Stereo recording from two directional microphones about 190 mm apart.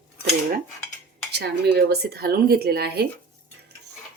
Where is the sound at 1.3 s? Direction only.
55° right (ahead or behind).